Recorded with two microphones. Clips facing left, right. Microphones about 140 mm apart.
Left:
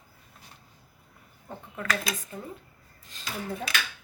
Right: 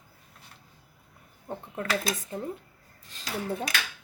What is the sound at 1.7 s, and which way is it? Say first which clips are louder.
Speech: right 2 dB; 30° right (ahead or behind).